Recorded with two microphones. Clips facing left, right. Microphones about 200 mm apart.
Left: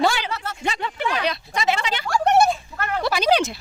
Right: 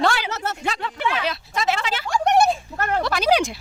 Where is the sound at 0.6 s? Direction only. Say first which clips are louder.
Left 2 dB; centre (ahead or behind).